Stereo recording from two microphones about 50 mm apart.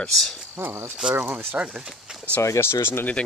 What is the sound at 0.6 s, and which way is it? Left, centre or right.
Speech, right.